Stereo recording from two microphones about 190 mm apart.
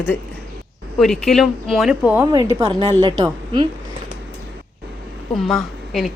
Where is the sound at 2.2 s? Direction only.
20° right (ahead or behind).